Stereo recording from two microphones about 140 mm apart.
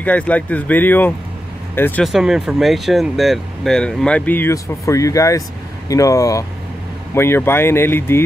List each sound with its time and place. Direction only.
0.0 s speech: 10° left (ahead or behind)
2.0 s speech: centre (ahead or behind); by 8.2 s 15° left (ahead or behind)